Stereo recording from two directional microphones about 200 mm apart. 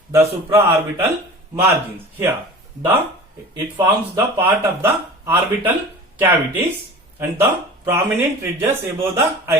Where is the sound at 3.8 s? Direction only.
15° right (ahead or behind).